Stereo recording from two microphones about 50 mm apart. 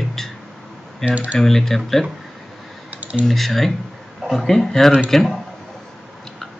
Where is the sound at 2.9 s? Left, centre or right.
Right.